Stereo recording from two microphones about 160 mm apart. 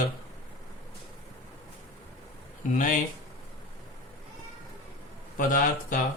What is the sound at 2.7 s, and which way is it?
Speech, 55° left (ahead or behind).